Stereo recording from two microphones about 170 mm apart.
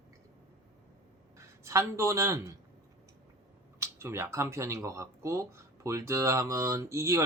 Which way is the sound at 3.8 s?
15° right (ahead or behind).